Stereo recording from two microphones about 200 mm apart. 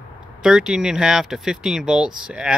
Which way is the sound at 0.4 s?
5° right (ahead or behind).